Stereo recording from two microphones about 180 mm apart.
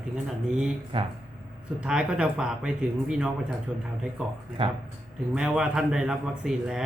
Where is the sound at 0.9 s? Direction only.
30° right (ahead or behind).